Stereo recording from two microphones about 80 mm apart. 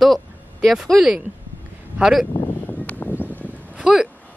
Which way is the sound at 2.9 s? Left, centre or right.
Left.